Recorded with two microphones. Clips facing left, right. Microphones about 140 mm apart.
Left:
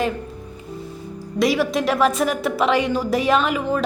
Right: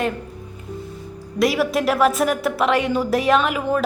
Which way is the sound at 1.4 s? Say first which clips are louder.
Even; centre (ahead or behind).